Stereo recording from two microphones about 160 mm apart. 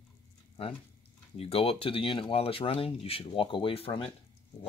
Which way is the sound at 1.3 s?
40° left (ahead or behind).